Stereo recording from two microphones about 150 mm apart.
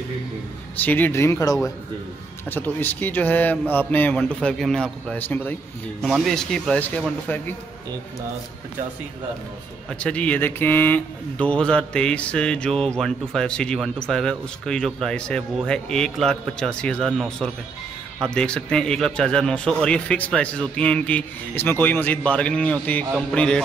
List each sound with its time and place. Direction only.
0.7 s speech: 10° left (ahead or behind)
6.0 s speech: centre (ahead or behind)
9.9 s speech: 10° left (ahead or behind)